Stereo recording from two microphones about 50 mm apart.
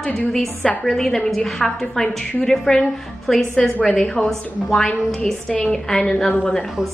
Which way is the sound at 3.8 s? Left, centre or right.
Centre.